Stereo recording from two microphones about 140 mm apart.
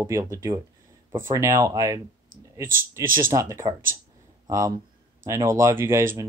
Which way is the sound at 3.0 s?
85° right.